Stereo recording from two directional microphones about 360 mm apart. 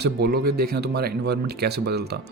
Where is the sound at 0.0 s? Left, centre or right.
Right.